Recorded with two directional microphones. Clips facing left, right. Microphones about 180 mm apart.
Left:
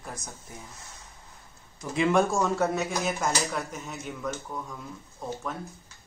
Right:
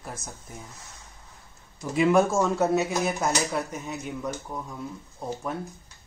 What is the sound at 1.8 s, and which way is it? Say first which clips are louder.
A man's voice: right 3 dB; 5° right (ahead or behind).